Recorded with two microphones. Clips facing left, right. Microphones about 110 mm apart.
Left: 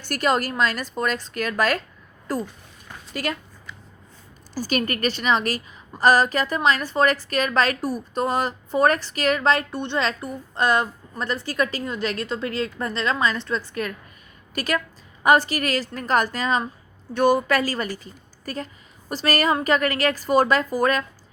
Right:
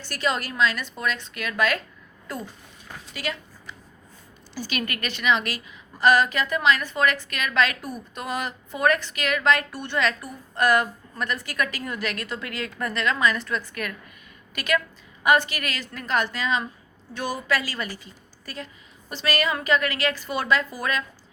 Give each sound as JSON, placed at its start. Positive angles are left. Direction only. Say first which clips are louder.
{"t": 0.1, "sound": "a woman's voice", "louder": "left 5 dB", "side_deg": 45}
{"t": 3.1, "sound": "speech", "louder": "left 4 dB", "side_deg": 45}
{"t": 4.5, "sound": "a woman's voice", "louder": "left 6 dB", "side_deg": 40}
{"t": 17.2, "sound": "a woman's voice", "louder": "left 8 dB", "side_deg": 55}